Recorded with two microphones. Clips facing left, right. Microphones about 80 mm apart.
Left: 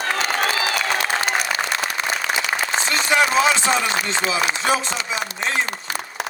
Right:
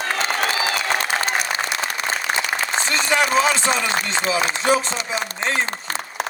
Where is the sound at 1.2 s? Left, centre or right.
Right.